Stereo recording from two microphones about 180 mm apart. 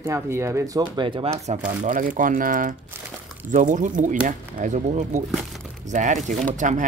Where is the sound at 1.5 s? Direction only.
45° right (ahead or behind).